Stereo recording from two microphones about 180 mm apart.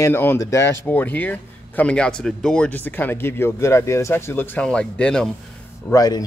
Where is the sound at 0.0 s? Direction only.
10° left (ahead or behind).